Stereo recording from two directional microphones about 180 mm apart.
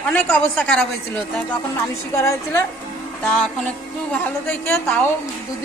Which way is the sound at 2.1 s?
15° left (ahead or behind).